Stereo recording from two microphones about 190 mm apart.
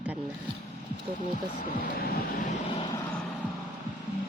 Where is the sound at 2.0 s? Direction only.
55° left (ahead or behind).